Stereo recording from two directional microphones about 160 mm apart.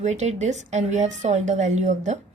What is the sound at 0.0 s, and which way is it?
A woman's voice, 45° right (ahead or behind).